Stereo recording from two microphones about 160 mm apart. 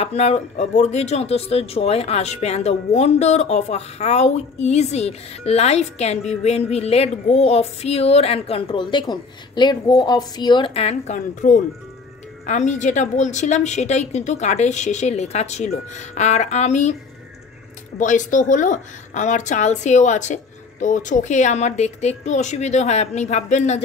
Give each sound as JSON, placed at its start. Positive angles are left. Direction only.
{"t": 0.0, "sound": "a woman's voice", "side_deg": 40}
{"t": 17.9, "sound": "a woman's voice", "side_deg": 50}